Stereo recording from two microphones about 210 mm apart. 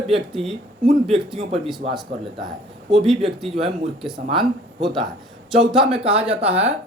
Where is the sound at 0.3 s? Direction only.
Centre (ahead or behind).